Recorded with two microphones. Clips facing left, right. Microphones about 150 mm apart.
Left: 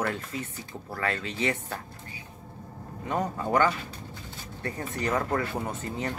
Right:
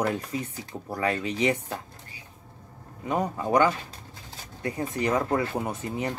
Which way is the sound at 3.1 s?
15° right (ahead or behind).